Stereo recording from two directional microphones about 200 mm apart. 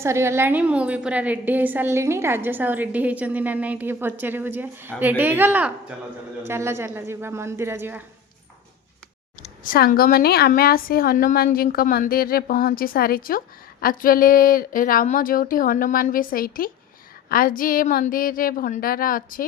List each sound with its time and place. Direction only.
0.0 s a woman's voice: 15° right (ahead or behind)
9.4 s a woman's voice: 45° left (ahead or behind)